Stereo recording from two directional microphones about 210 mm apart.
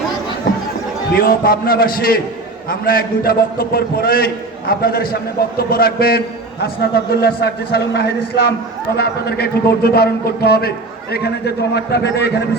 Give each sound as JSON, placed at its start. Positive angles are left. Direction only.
{"t": 1.1, "sound": "a man's voice", "side_deg": 45}